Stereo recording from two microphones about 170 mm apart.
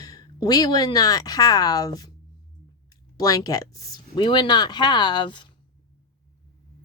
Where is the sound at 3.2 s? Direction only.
20° left (ahead or behind).